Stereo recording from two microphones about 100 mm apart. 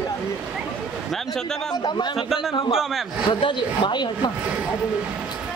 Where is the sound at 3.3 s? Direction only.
50° left (ahead or behind).